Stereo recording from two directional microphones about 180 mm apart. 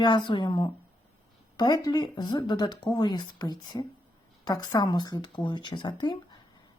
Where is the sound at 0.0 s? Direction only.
25° left (ahead or behind).